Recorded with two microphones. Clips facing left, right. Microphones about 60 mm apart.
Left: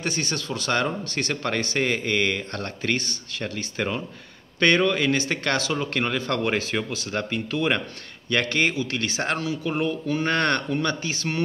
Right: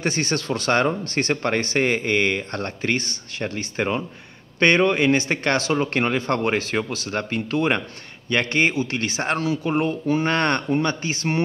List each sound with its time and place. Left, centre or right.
0.0 s speech: right